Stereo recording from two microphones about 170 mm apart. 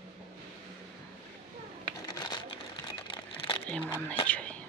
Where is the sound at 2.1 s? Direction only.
20° left (ahead or behind).